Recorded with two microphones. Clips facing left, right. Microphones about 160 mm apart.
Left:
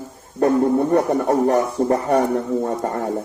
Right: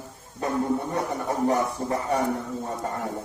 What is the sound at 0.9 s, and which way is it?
Speech, 65° left (ahead or behind).